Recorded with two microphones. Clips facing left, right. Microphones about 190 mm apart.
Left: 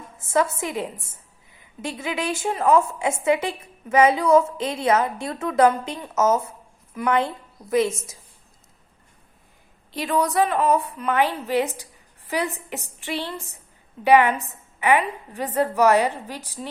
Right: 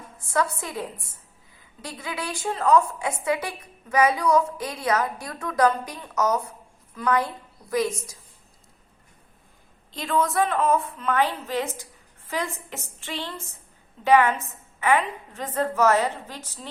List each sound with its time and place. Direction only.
0.2 s a woman's voice: 20° left (ahead or behind)
9.9 s a woman's voice: 15° left (ahead or behind)